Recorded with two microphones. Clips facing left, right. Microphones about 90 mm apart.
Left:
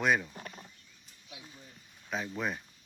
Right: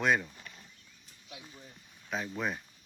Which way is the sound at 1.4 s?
Centre (ahead or behind).